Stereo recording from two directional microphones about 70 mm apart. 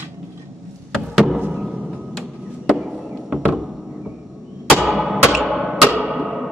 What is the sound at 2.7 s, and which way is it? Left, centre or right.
Chop, centre.